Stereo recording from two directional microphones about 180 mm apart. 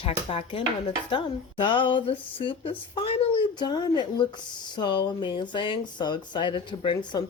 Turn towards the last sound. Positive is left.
turn(degrees=25)  # may be behind; listen again after turning